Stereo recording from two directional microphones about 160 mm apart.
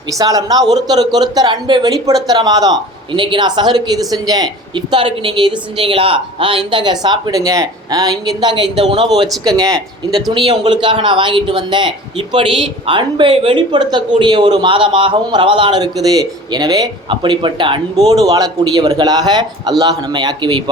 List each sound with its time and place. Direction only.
0.1 s a man's voice: 20° right (ahead or behind); by 9.0 s 35° right (ahead or behind)
9.7 s speech: centre (ahead or behind)
10.3 s a man's voice: 30° right (ahead or behind)